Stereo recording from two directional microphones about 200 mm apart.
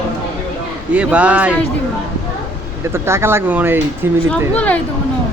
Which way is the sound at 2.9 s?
10° right (ahead or behind).